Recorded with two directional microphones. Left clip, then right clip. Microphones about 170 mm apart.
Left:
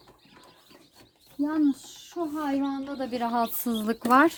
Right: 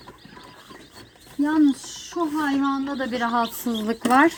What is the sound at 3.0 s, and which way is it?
Speech, 50° left (ahead or behind).